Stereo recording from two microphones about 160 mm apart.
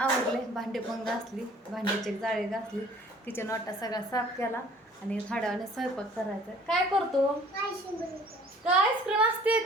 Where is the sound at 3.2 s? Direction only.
15° left (ahead or behind).